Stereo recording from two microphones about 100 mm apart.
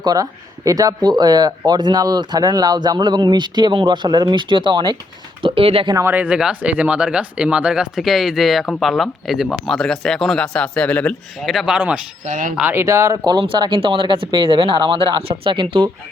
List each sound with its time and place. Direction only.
0.0 s speech: 40° right (ahead or behind)
5.4 s speech: 65° right (ahead or behind)
6.1 s speech: 15° right (ahead or behind); by 11.1 s 10° left (ahead or behind)
11.4 s speech: 5° right (ahead or behind)
12.5 s speech: 15° right (ahead or behind)
12.8 s speech: 30° right (ahead or behind)
13.4 s speech: 55° right (ahead or behind)